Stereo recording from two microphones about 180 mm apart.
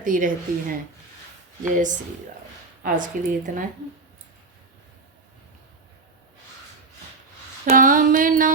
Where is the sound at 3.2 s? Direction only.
45° right (ahead or behind).